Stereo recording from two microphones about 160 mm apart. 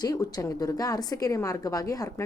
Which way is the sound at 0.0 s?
25° left (ahead or behind).